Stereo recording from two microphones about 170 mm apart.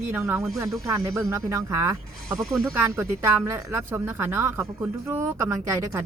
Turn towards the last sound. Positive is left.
turn(degrees=-15)  # may be behind; listen again after turning